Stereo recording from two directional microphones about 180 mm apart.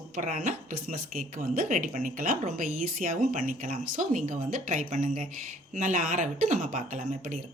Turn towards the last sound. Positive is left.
turn(degrees=-45)  # may be behind; listen again after turning